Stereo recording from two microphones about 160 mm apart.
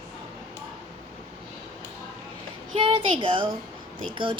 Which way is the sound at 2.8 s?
30° right (ahead or behind).